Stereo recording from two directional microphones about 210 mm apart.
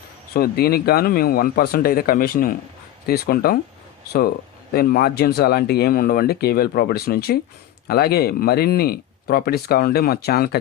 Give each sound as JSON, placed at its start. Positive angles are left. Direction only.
{"t": 0.3, "sound": "speech", "side_deg": 45}
{"t": 4.7, "sound": "speech", "side_deg": 45}